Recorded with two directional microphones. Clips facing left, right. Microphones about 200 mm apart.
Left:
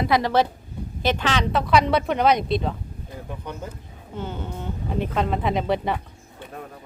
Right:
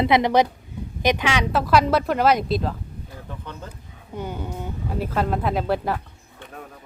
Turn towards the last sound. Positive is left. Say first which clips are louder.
# even
turn(degrees=0)  # may be behind; listen again after turning